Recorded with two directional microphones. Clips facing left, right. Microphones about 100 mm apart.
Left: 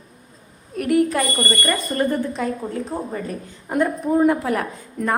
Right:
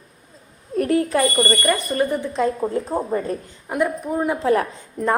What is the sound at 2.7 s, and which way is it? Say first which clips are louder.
Speech: right 4 dB; 30° right (ahead or behind).